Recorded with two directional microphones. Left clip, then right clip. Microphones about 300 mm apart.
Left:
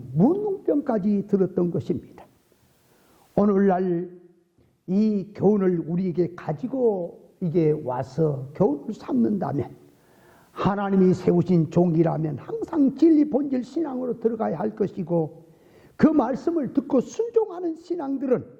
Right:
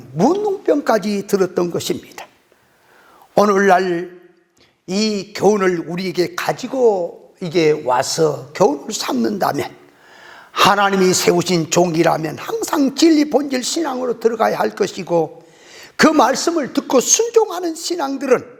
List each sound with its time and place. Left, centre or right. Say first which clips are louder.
0.4 s a man's voice: right 7 dB; centre
0.7 s a man's voice: right 9 dB; centre
3.3 s a man's voice: right 9 dB; centre
6.7 s a man's voice: right 8 dB; right
7.3 s a man's voice: right 7 dB; centre